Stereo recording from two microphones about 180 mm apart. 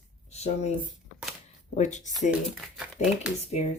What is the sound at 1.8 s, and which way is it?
Speech, 40° left (ahead or behind).